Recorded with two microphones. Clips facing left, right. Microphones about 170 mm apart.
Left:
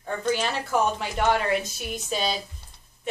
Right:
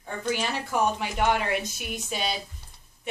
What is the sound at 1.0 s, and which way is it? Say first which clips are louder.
Speech: left 1 dB; 15° right (ahead or behind).